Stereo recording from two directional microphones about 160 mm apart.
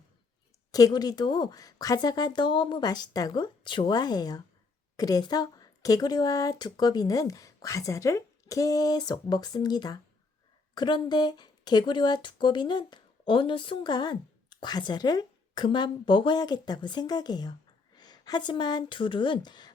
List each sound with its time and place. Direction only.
0.7 s speech: 25° left (ahead or behind)